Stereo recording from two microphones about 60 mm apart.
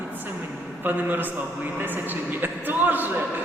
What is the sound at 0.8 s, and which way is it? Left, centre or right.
A man's voice, right.